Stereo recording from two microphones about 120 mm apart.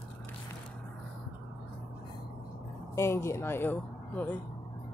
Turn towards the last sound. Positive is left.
turn(degrees=15)  # may be behind; listen again after turning